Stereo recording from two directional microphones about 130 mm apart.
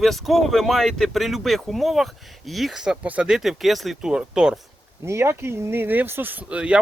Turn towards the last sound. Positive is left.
turn(degrees=-10)  # may be behind; listen again after turning